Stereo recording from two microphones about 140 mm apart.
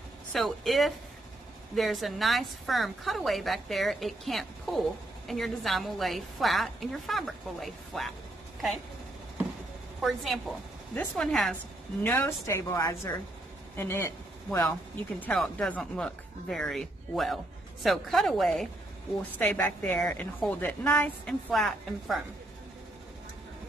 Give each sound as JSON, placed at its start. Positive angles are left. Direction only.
{"t": 0.3, "sound": "a woman's voice", "side_deg": 0}
{"t": 10.0, "sound": "a woman's voice", "side_deg": 0}
{"t": 12.0, "sound": "a woman's voice", "side_deg": 15}
{"t": 15.1, "sound": "a woman's voice", "side_deg": 5}